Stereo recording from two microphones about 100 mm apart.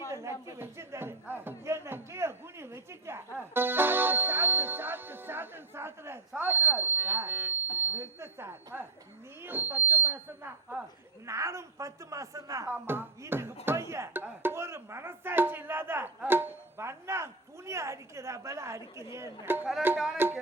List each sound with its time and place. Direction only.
0.1 s speech: 30° right (ahead or behind)
11.3 s speech: 30° right (ahead or behind)
12.7 s speech: 20° right (ahead or behind)